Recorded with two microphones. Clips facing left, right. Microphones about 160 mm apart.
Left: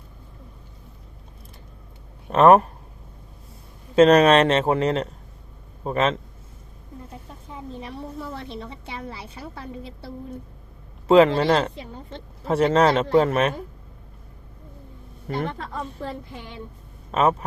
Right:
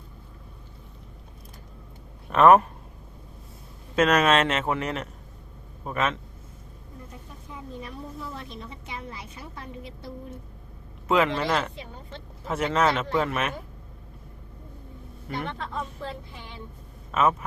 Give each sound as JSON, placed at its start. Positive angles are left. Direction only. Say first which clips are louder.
{"t": 2.3, "sound": "speech", "louder": "left 2 dB", "side_deg": 35}
{"t": 3.9, "sound": "a woman's voice", "louder": "left 7 dB", "side_deg": 30}
{"t": 7.4, "sound": "a woman's voice", "louder": "left 3 dB", "side_deg": 30}
{"t": 11.1, "sound": "speech", "louder": "left 8 dB", "side_deg": 30}
{"t": 15.3, "sound": "speech", "louder": "left 4 dB", "side_deg": 40}